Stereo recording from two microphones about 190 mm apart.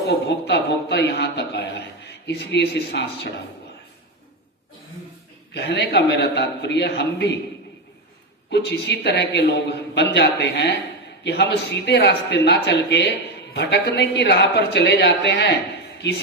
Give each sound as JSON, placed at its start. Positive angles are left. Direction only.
{"t": 0.1, "sound": "speech", "side_deg": 65}
{"t": 5.5, "sound": "speech", "side_deg": 65}
{"t": 8.4, "sound": "speech", "side_deg": 60}